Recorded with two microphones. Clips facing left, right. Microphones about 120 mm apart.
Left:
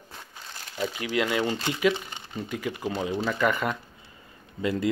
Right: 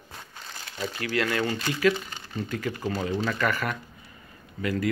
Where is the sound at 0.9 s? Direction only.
20° left (ahead or behind).